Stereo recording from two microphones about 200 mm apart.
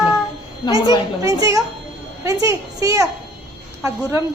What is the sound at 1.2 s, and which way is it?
A child's voice, 20° right (ahead or behind).